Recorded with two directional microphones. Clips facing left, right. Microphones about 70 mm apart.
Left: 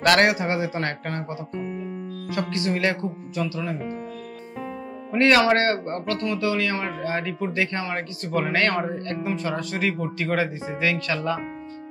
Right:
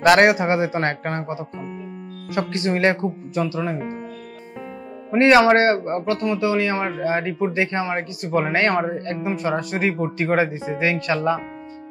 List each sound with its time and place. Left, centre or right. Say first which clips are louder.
0.0 s speech: right 5 dB; centre
5.1 s speech: right 4 dB; right